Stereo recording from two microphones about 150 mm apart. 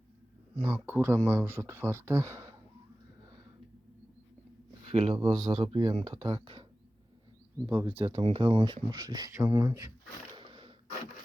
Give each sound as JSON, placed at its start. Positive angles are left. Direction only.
{"t": 0.5, "sound": "speech", "side_deg": -20}
{"t": 4.9, "sound": "speech", "side_deg": -40}
{"t": 7.9, "sound": "speech", "side_deg": -40}
{"t": 10.3, "sound": "a sound", "side_deg": -35}